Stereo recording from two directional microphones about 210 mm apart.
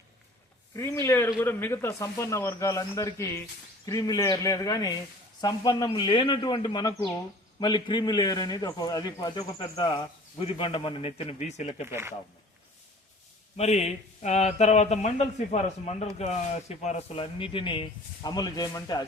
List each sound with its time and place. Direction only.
0.8 s a man's voice: 15° left (ahead or behind); by 11.9 s 30° left (ahead or behind)
11.9 s speech: 10° right (ahead or behind)
13.6 s speech: 30° left (ahead or behind)